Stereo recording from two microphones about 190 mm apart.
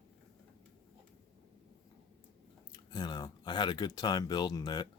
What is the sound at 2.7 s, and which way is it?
Speech, 20° left (ahead or behind).